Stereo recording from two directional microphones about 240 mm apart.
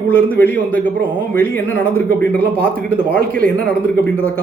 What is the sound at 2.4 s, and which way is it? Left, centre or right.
A man's voice, right.